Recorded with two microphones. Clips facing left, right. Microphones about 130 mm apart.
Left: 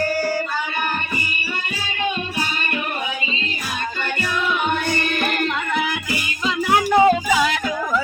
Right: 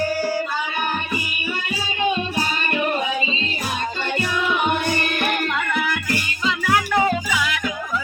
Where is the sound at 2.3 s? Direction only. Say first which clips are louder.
Right 2 dB; 30° right (ahead or behind); by 5.5 s 5° right (ahead or behind).